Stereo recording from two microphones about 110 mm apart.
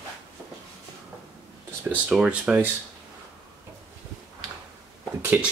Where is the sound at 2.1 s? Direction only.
10° right (ahead or behind).